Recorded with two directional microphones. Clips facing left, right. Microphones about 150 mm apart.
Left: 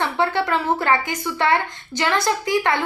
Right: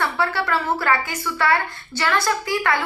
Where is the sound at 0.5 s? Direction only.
20° left (ahead or behind).